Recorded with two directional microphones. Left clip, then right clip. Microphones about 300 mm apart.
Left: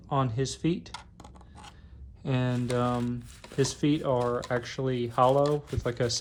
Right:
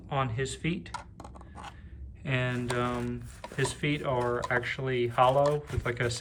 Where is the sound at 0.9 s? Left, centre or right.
Centre.